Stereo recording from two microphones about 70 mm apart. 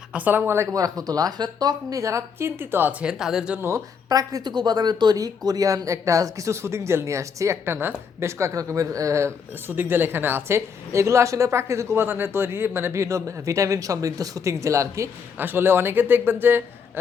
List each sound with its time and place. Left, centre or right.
0.1 s speech: right
0.5 s a man's voice: right
0.8 s a woman's voice: right
3.0 s speech: centre
3.6 s speech: right
9.7 s a man's voice: right
10.9 s speech: right
12.0 s speech: right
15.4 s a man's voice: right